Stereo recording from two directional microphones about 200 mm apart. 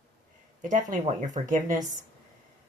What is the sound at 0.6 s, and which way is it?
Speech, 40° right (ahead or behind).